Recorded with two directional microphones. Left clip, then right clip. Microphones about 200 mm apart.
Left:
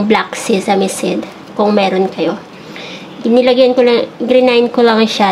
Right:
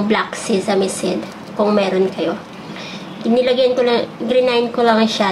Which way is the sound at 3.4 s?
35° left (ahead or behind).